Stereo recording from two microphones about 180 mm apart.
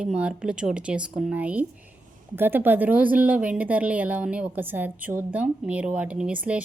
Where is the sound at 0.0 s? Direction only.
5° right (ahead or behind).